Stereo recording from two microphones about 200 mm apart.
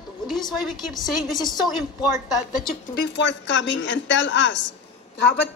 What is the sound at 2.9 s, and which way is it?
Speech, 55° left (ahead or behind).